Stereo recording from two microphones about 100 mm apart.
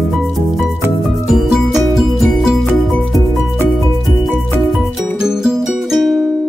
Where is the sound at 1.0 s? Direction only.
Centre (ahead or behind).